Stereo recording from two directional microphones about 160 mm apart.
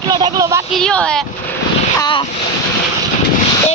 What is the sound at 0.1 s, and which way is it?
Speech, 25° right (ahead or behind).